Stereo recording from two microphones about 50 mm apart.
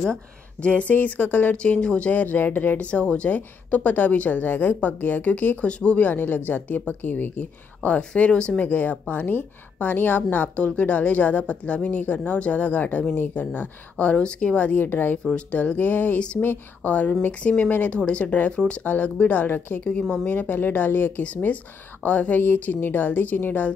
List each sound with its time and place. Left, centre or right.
0.6 s speech: left
1.6 s speech: left
5.7 s speech: left
5.9 s speech: left
8.6 s speech: left
20.3 s speech: left
21.2 s speech: left